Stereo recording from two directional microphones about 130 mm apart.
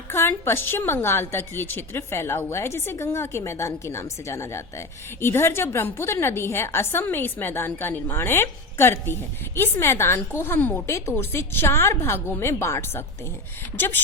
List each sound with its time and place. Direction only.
0.1 s a woman's voice: 20° left (ahead or behind)